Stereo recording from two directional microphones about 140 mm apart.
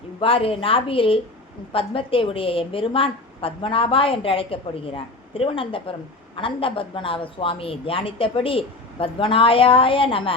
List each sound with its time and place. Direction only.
0.2 s a woman's voice: 40° left (ahead or behind)